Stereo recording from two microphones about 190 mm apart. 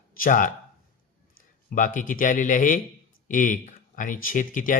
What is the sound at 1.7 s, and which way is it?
Speech, 45° left (ahead or behind).